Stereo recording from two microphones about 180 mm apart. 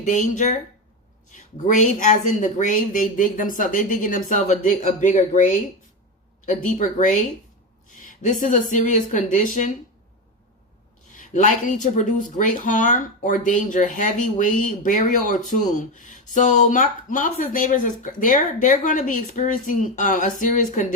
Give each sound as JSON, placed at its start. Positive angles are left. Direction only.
{"t": 0.0, "sound": "speech", "side_deg": 45}
{"t": 8.2, "sound": "speech", "side_deg": 45}
{"t": 11.2, "sound": "speech", "side_deg": 45}